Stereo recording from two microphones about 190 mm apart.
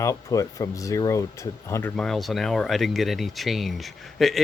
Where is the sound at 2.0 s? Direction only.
Centre (ahead or behind).